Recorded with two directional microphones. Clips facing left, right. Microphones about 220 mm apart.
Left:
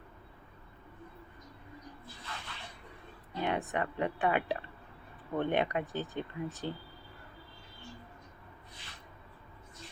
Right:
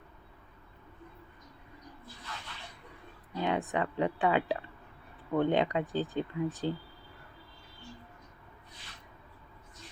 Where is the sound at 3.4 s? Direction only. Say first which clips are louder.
Right 2 dB; 15° right (ahead or behind).